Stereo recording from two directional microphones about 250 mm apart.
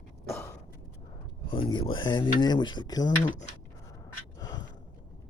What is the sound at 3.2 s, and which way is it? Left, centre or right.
Speech, left.